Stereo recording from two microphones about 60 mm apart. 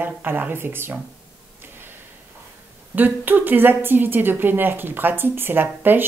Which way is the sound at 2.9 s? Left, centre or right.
Right.